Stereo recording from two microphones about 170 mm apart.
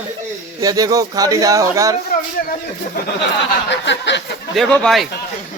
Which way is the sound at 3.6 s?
90° left.